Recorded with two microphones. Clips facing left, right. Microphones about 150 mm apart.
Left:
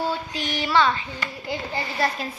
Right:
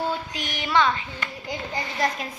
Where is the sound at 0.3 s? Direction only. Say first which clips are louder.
Left 4 dB; 30° left (ahead or behind).